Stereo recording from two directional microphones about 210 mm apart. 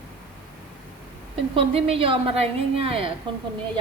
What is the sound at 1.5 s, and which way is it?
A woman's voice, 30° right (ahead or behind).